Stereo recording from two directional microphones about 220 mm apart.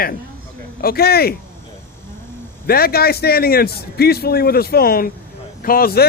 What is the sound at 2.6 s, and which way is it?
A man's voice, 45° left (ahead or behind).